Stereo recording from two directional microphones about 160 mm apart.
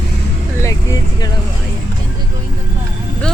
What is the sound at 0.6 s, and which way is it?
Speech, 20° left (ahead or behind).